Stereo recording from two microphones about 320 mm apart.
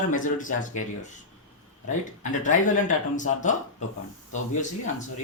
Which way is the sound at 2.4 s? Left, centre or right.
Left.